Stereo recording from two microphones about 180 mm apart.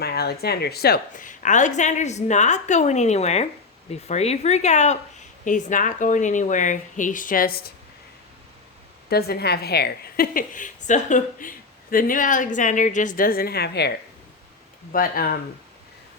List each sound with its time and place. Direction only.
0.0 s a woman's voice: 60° left (ahead or behind)
9.0 s a woman's voice: 60° left (ahead or behind)
14.9 s a woman's voice: 50° left (ahead or behind)